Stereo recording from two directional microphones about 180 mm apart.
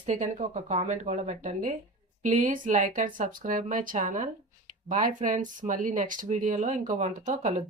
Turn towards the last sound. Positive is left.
turn(degrees=-45)  # may be behind; listen again after turning